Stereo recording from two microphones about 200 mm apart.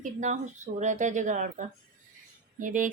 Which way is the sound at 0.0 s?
40° right (ahead or behind).